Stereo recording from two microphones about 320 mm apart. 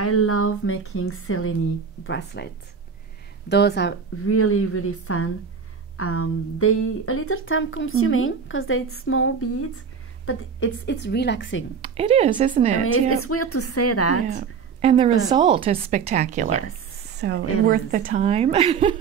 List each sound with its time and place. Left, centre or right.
0.0 s speech: left
11.8 s speech: centre
13.1 s speech: left
14.3 s a woman's voice: centre